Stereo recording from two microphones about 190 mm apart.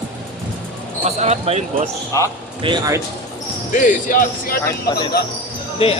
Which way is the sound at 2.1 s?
15° left (ahead or behind).